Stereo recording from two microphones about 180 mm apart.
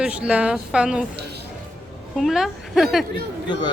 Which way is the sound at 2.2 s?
Centre (ahead or behind).